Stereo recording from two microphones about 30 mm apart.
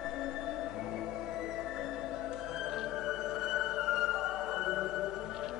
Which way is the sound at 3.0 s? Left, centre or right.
Centre.